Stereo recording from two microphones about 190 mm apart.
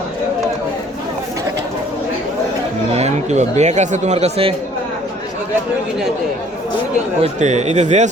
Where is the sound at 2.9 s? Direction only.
35° right (ahead or behind).